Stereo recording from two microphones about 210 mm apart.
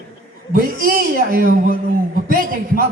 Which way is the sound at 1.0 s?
45° right (ahead or behind).